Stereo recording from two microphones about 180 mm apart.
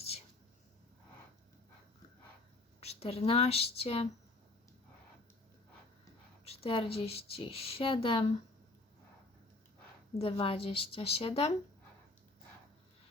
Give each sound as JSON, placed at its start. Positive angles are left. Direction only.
{"t": 2.8, "sound": "a woman's voice", "side_deg": 35}
{"t": 6.4, "sound": "a woman's voice", "side_deg": 35}
{"t": 10.2, "sound": "a woman's voice", "side_deg": 30}